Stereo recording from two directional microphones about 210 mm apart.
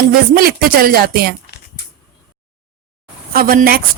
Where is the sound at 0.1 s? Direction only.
45° right (ahead or behind).